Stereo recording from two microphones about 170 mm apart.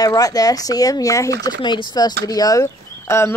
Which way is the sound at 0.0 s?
20° left (ahead or behind).